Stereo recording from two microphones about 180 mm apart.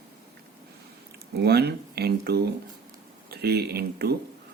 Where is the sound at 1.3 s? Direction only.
65° right (ahead or behind).